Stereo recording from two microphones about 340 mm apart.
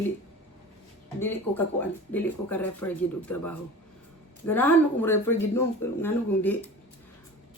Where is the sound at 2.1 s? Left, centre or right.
Centre.